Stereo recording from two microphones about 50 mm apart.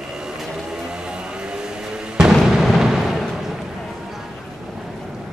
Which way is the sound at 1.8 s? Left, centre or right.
Centre.